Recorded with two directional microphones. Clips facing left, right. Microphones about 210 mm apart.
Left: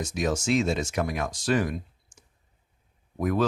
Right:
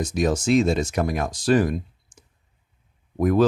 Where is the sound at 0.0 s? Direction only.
35° right (ahead or behind).